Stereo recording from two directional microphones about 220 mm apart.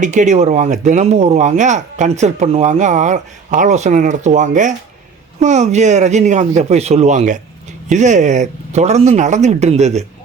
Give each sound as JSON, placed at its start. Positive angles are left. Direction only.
{"t": 0.0, "sound": "speech", "side_deg": -35}